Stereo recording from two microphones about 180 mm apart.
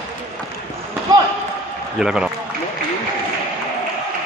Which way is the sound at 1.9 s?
5° right (ahead or behind).